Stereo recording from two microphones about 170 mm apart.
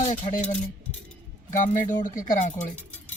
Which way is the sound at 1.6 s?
50° left (ahead or behind).